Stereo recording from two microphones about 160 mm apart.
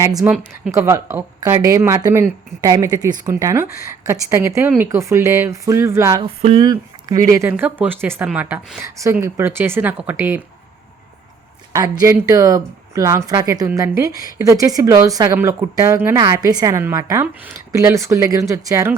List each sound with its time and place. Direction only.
0.0 s speech: 20° right (ahead or behind)
6.2 s a sound: 35° right (ahead or behind)
6.7 s speech: 20° right (ahead or behind)
11.7 s speech: 20° right (ahead or behind)